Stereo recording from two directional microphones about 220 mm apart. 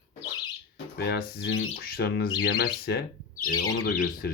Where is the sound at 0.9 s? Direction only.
45° left (ahead or behind).